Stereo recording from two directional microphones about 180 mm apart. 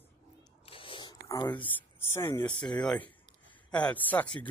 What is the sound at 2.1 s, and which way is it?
Speech, 15° left (ahead or behind).